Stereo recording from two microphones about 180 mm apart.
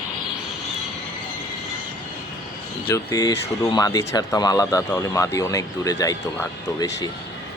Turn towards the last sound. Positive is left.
turn(degrees=20)  # may be behind; listen again after turning